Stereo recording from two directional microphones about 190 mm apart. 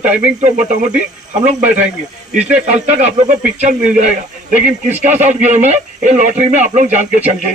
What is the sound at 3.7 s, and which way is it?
Speech, 40° right (ahead or behind).